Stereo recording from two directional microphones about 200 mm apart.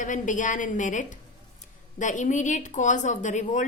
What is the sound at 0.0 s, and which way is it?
A woman's voice, 40° left (ahead or behind).